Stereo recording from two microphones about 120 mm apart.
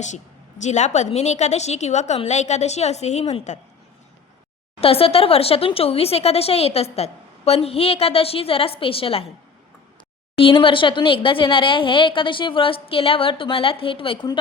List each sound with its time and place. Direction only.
0.6 s a woman's voice: 75° left (ahead or behind)
4.8 s speech: 55° left (ahead or behind)
10.3 s speech: 50° left (ahead or behind)